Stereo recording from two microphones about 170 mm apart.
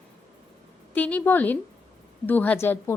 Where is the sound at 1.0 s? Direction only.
10° left (ahead or behind).